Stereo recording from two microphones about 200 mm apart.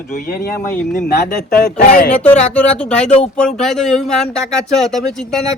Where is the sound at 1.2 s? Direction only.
40° left (ahead or behind).